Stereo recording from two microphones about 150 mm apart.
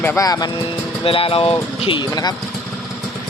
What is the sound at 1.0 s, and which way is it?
Speech, 40° left (ahead or behind).